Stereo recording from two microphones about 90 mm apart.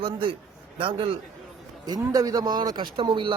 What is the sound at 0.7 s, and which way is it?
Speech, 90° right.